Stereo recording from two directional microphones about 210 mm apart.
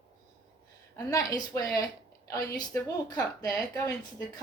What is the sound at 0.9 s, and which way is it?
A woman's voice, 15° left (ahead or behind).